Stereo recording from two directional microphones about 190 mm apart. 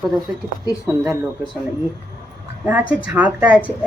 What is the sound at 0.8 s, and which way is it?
Speech, 10° right (ahead or behind).